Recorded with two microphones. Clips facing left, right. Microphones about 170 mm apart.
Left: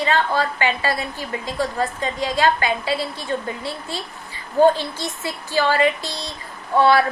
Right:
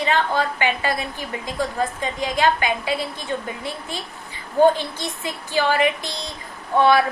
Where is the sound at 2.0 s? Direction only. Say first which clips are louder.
Left 1 dB; 15° right (ahead or behind).